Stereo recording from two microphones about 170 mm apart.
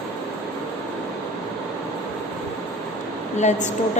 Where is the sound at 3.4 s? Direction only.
45° left (ahead or behind).